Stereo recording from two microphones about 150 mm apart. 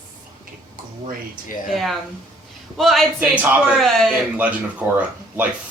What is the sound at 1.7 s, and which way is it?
A woman's voice, centre (ahead or behind).